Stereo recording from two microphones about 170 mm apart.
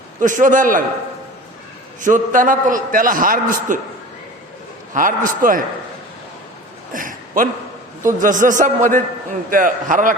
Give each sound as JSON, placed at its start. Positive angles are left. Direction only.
{"t": 0.2, "sound": "a man's voice", "side_deg": -50}
{"t": 2.0, "sound": "a man's voice", "side_deg": -50}
{"t": 4.9, "sound": "a man's voice", "side_deg": -50}
{"t": 6.9, "sound": "a sound", "side_deg": -50}
{"t": 8.0, "sound": "a man's voice", "side_deg": -50}